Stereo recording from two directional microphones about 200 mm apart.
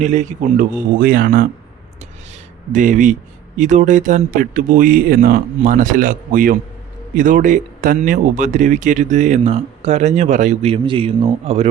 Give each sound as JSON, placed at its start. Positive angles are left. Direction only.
{"t": 0.0, "sound": "speech", "side_deg": -40}
{"t": 2.7, "sound": "speech", "side_deg": -40}